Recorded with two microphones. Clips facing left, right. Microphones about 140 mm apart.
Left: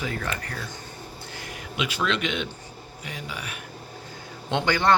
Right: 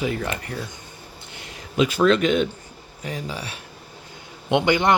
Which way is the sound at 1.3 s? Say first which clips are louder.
Right 9 dB; 25° right (ahead or behind).